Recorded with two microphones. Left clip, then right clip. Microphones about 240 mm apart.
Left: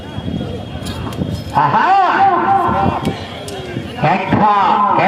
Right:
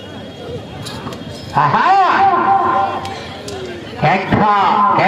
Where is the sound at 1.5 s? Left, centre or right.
Right.